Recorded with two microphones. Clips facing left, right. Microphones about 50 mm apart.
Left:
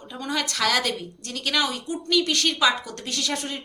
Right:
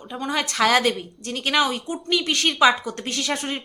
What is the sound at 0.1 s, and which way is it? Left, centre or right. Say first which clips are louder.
A woman's voice: right 3 dB; right.